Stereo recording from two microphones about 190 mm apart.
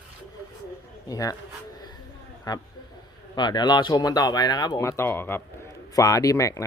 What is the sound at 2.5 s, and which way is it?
A man's voice, 20° left (ahead or behind).